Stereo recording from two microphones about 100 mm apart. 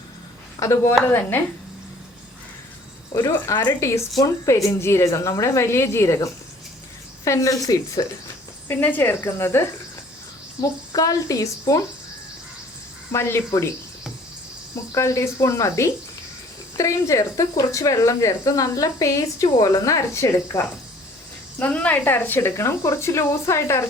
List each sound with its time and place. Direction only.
0.6 s speech: 30° left (ahead or behind)
3.2 s speech: 30° left (ahead or behind)
8.6 s speech: 20° left (ahead or behind)
10.6 s speech: 35° left (ahead or behind)
13.1 s speech: 25° left (ahead or behind)
14.9 s speech: 30° left (ahead or behind)
21.6 s speech: 15° left (ahead or behind)